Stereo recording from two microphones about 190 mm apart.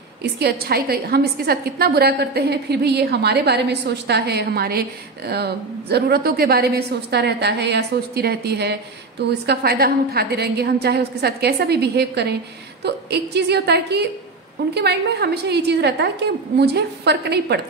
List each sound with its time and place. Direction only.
0.2 s a woman's voice: 60° right (ahead or behind)